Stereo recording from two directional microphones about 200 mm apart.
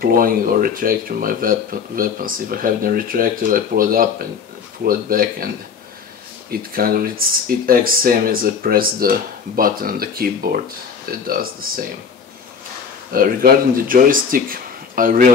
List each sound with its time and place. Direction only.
0.0 s speech: 45° right (ahead or behind)
6.5 s speech: 45° right (ahead or behind)
13.1 s speech: 45° right (ahead or behind)